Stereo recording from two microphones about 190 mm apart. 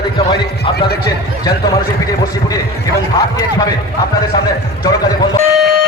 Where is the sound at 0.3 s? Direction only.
25° left (ahead or behind).